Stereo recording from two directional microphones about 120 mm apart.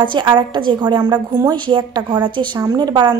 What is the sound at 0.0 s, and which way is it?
A woman's voice, 40° right (ahead or behind).